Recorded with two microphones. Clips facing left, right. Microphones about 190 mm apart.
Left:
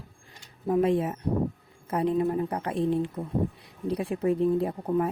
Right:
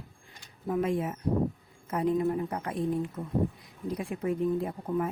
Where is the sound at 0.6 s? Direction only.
35° left (ahead or behind).